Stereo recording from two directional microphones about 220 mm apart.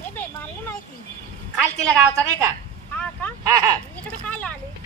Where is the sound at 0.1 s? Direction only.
10° left (ahead or behind).